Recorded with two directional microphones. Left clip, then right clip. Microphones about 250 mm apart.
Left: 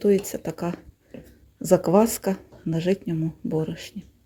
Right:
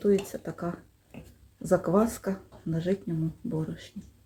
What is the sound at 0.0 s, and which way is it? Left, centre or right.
Speech, left.